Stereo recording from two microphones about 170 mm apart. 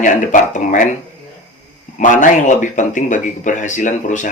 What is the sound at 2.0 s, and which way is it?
Speech, 50° left (ahead or behind).